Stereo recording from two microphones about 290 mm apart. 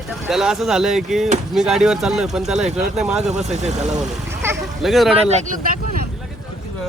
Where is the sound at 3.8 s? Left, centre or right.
Centre.